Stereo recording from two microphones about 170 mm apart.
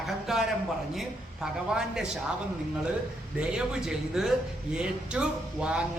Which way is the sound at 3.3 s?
5° right (ahead or behind).